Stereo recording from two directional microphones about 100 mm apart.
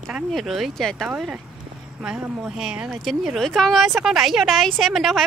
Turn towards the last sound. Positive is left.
turn(degrees=0)  # may be behind; listen again after turning